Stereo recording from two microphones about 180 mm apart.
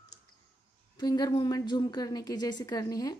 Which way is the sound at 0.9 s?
20° left (ahead or behind).